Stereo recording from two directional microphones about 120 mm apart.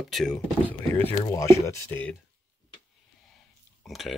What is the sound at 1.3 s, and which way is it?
Speech, 25° left (ahead or behind).